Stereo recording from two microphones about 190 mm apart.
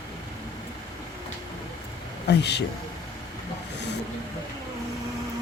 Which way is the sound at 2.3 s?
65° left (ahead or behind).